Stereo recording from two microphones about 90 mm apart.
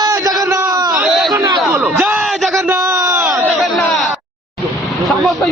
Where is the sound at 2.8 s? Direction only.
40° right (ahead or behind).